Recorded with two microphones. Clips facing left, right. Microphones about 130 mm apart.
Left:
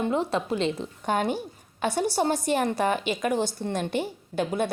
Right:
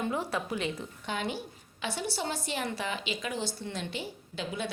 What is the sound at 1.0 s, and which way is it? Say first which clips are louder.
A woman's voice: left 9 dB; 50° left (ahead or behind).